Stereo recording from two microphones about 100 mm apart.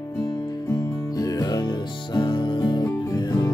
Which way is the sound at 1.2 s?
40° left (ahead or behind).